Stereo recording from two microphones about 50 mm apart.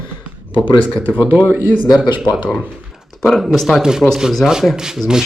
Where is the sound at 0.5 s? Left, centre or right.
Left.